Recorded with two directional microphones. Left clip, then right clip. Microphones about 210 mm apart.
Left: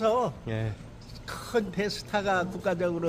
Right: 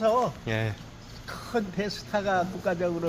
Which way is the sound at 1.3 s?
30° left (ahead or behind).